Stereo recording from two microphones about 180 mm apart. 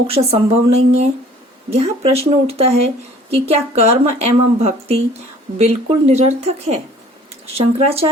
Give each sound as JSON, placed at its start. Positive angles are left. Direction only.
{"t": 0.1, "sound": "a woman's voice", "side_deg": -35}